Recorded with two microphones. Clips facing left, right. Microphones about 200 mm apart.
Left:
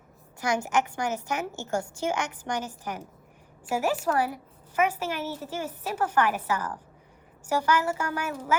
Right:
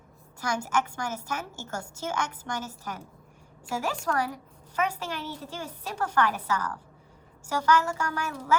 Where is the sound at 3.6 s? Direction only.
10° left (ahead or behind).